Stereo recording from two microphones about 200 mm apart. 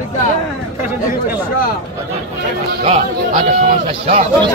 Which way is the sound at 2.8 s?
40° right (ahead or behind).